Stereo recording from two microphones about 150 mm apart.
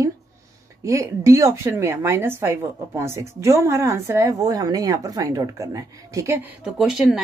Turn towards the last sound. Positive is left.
turn(degrees=-5)  # may be behind; listen again after turning